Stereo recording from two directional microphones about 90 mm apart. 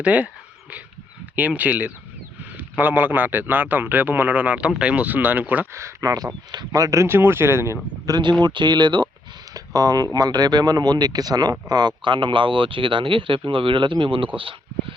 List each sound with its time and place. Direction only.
0.0 s speech: 15° right (ahead or behind)
1.4 s a man's voice: 20° right (ahead or behind)
5.7 s a man's voice: 35° right (ahead or behind)
8.0 s speech: 50° right (ahead or behind)
9.6 s speech: 45° right (ahead or behind); by 14.9 s 75° right (ahead or behind)